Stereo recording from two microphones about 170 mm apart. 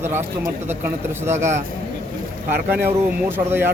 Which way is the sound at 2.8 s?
15° right (ahead or behind).